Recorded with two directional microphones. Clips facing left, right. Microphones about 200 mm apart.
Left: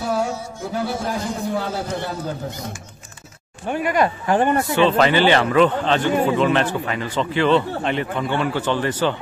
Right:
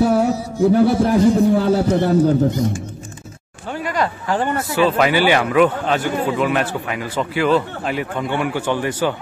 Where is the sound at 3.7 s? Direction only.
20° left (ahead or behind).